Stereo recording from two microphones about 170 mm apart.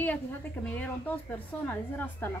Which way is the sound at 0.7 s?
10° left (ahead or behind).